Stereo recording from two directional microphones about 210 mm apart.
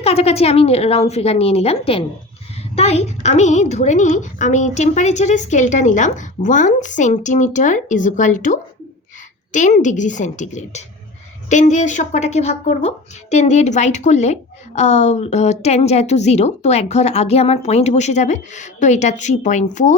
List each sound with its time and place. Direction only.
0.0 s a woman's voice: 30° left (ahead or behind)